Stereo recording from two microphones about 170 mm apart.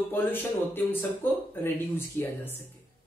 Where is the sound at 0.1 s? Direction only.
10° left (ahead or behind).